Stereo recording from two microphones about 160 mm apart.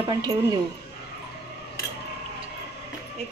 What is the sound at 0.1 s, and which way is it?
Speech, 25° right (ahead or behind).